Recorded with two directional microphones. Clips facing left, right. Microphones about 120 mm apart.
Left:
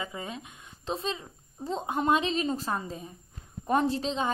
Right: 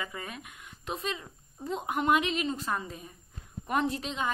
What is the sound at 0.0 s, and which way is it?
A woman's voice, 25° left (ahead or behind).